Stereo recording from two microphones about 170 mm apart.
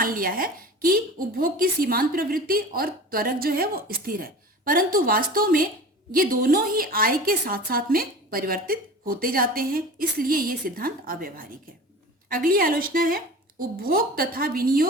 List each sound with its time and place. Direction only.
0.0 s speech: 55° right (ahead or behind)